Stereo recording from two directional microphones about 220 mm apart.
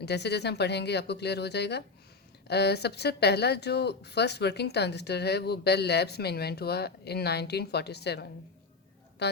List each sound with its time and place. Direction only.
0.0 s a woman's voice: 50° left (ahead or behind)